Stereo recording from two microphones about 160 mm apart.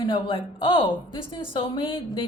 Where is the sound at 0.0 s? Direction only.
30° left (ahead or behind).